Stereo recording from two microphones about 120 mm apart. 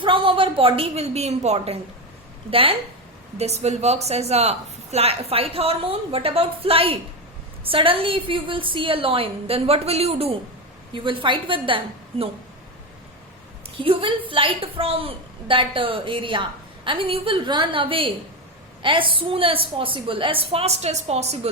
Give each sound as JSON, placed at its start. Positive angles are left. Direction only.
{"t": 0.0, "sound": "a woman's voice", "side_deg": -45}
{"t": 3.3, "sound": "a woman's voice", "side_deg": -65}
{"t": 10.9, "sound": "a woman's voice", "side_deg": -45}
{"t": 13.8, "sound": "a woman's voice", "side_deg": -50}